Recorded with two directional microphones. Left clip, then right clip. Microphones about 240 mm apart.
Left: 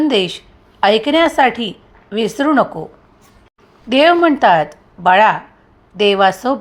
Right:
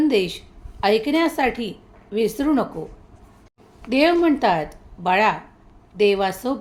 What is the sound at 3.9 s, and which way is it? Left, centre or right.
A woman's voice, centre.